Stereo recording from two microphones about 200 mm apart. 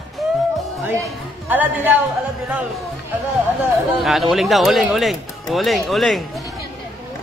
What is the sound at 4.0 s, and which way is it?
Speech, centre (ahead or behind).